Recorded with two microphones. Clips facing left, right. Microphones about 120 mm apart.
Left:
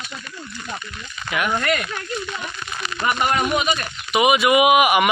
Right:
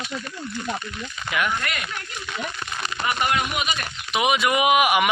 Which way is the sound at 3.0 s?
45° left (ahead or behind).